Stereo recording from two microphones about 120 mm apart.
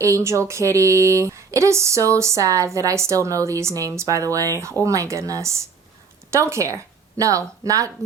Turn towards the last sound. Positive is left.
turn(degrees=-30)  # may be behind; listen again after turning